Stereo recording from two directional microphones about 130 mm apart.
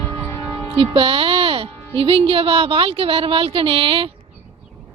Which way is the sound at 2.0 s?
45° right (ahead or behind).